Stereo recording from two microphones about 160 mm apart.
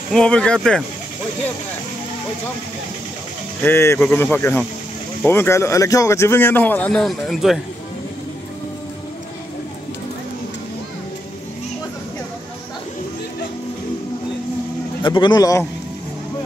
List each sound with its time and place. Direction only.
0.1 s speech: 5° left (ahead or behind)
3.6 s speech: 15° left (ahead or behind)
15.0 s a man's voice: 30° left (ahead or behind)